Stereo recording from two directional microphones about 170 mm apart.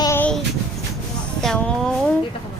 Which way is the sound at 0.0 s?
15° left (ahead or behind).